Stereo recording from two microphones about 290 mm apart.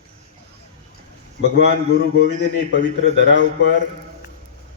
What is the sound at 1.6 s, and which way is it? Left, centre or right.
A man's voice, left.